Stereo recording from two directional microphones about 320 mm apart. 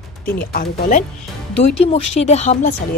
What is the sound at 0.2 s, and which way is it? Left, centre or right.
Speech, left.